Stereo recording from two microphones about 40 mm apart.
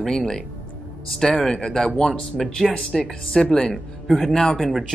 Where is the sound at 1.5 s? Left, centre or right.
Left.